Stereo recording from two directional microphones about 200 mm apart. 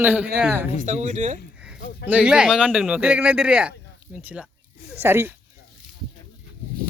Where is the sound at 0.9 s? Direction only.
40° right (ahead or behind).